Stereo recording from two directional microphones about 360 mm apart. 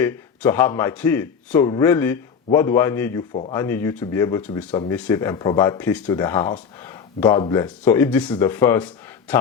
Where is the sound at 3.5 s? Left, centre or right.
Centre.